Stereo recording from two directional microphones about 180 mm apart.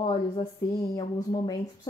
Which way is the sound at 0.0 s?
25° left (ahead or behind).